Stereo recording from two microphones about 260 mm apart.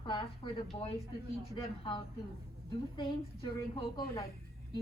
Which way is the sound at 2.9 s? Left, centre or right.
Centre.